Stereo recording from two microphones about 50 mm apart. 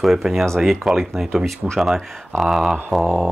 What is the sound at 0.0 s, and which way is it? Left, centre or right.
Speech, centre.